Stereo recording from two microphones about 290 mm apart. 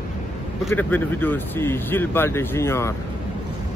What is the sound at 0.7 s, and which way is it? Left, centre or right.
Speech, centre.